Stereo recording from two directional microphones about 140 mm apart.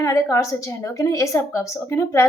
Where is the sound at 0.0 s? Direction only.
20° left (ahead or behind).